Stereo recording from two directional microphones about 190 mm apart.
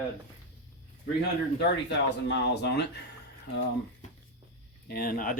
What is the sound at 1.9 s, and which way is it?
Speech, 65° left (ahead or behind).